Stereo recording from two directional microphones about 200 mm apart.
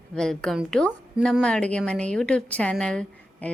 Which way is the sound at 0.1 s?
5° left (ahead or behind).